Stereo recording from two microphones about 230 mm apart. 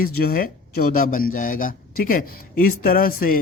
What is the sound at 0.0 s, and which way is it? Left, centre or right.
Speech, left.